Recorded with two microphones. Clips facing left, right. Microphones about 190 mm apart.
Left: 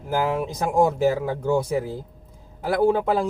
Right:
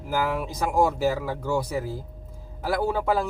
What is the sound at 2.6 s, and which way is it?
Speech, 20° left (ahead or behind).